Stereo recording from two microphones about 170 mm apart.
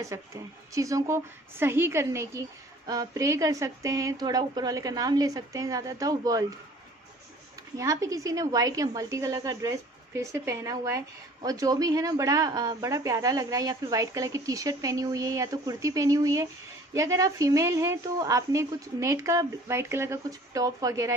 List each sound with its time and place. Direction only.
0.0 s a woman's voice: 20° right (ahead or behind)
7.7 s speech: 20° right (ahead or behind)